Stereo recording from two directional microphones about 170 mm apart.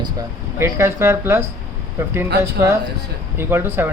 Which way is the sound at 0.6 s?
15° right (ahead or behind).